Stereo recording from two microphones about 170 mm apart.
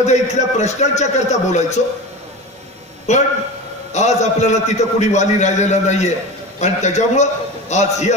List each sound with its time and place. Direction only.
0.0 s a man's voice: 40° left (ahead or behind)
3.1 s a man's voice: 45° left (ahead or behind)